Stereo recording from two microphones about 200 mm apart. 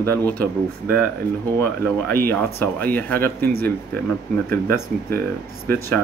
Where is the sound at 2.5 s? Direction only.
10° left (ahead or behind).